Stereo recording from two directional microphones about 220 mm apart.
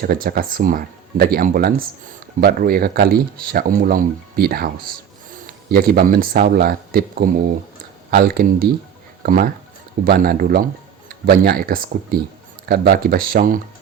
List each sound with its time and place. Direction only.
0.0 s speech: 40° right (ahead or behind)